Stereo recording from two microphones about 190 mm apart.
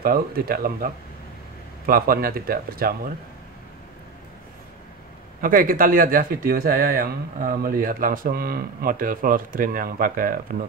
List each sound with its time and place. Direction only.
0.0 s speech: 50° right (ahead or behind)
5.4 s speech: 45° right (ahead or behind)